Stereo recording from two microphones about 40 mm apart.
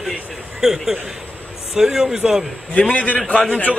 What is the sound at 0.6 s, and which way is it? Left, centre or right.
A man's voice, centre.